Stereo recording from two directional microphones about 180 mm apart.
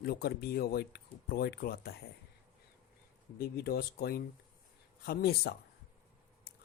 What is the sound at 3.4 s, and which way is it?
Speech, 60° left (ahead or behind).